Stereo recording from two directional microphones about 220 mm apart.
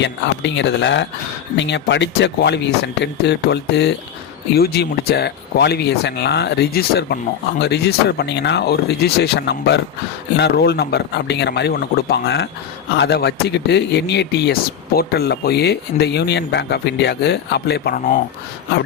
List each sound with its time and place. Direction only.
0.0 s speech: 55° left (ahead or behind)